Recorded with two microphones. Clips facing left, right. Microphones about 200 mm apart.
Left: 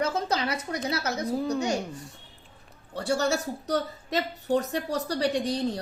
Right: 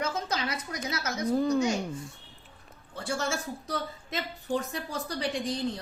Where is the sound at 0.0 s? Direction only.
35° left (ahead or behind).